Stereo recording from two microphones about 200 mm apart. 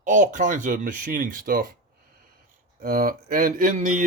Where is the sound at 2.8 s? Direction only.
45° right (ahead or behind).